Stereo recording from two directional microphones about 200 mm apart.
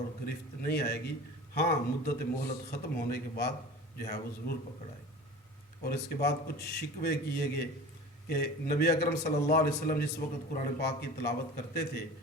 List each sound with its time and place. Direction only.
0.3 s a man's voice: 55° left (ahead or behind)
5.8 s a man's voice: 50° left (ahead or behind)